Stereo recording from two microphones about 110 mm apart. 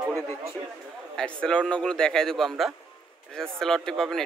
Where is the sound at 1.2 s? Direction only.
10° left (ahead or behind).